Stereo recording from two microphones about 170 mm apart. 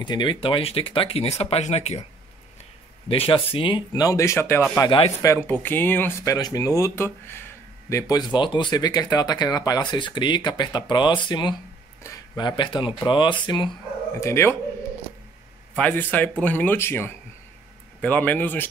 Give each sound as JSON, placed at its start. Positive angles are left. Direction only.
{"t": 0.0, "sound": "speech", "side_deg": 25}
{"t": 3.1, "sound": "speech", "side_deg": 30}
{"t": 14.2, "sound": "speech", "side_deg": 15}
{"t": 15.7, "sound": "speech", "side_deg": 10}